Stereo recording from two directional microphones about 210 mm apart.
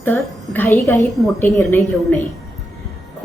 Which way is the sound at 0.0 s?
10° left (ahead or behind).